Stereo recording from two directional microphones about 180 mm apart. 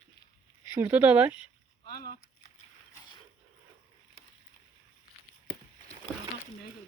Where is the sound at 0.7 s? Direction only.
10° right (ahead or behind).